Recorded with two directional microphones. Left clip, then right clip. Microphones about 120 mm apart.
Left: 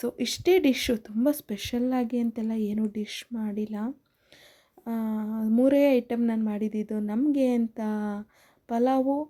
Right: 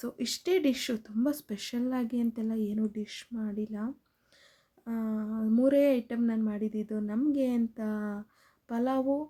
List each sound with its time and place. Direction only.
0.0 s speech: 35° left (ahead or behind)